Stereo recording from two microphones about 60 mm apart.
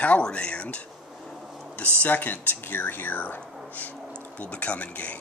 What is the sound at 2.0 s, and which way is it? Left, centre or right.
Speech, left.